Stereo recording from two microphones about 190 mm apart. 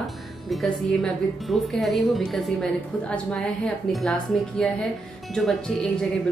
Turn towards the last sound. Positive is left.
turn(degrees=5)  # may be behind; listen again after turning